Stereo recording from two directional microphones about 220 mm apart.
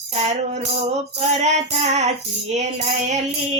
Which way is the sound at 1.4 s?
30° right (ahead or behind).